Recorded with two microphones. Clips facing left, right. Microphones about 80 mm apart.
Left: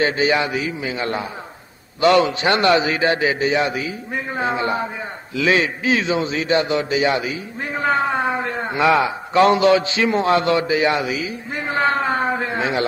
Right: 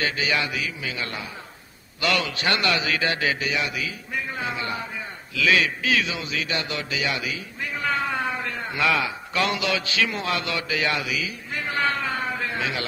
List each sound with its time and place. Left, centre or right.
0.0 s a man's voice: left